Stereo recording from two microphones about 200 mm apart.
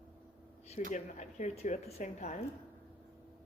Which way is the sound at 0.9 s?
35° left (ahead or behind).